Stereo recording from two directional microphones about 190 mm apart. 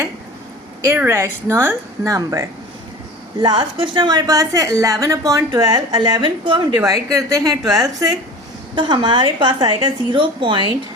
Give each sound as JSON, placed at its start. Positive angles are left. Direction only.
{"t": 0.9, "sound": "a woman's voice", "side_deg": -10}